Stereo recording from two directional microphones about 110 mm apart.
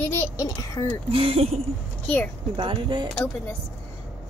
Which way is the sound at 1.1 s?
60° right (ahead or behind).